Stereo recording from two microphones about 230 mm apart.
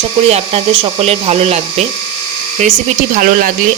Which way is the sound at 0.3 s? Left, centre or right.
Right.